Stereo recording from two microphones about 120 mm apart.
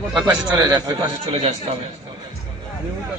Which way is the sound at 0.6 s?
30° right (ahead or behind).